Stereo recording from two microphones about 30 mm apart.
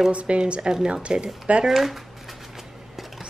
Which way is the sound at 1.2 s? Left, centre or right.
Right.